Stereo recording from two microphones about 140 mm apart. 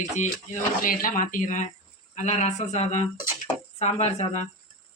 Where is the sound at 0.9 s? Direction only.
75° left (ahead or behind); by 4.4 s 50° left (ahead or behind).